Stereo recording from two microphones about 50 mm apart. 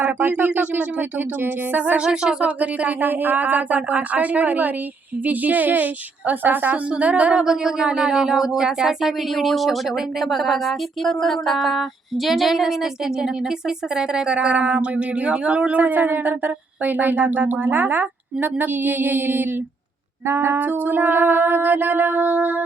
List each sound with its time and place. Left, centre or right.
0.0 s music: right
2.0 s speech: centre
2.4 s a woman's voice: right
3.0 s music: right
6.9 s speech: right
20.2 s a sound: right
20.6 s music: right